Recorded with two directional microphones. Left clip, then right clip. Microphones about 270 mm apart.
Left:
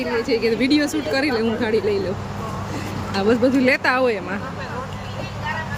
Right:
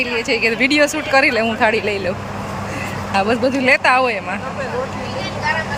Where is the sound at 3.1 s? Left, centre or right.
Centre.